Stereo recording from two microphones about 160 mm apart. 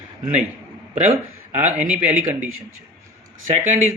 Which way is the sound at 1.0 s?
50° right (ahead or behind).